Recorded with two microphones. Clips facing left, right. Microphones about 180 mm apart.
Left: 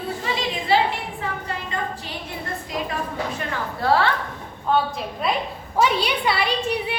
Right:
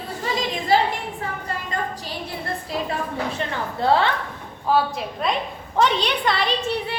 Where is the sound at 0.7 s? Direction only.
40° right (ahead or behind).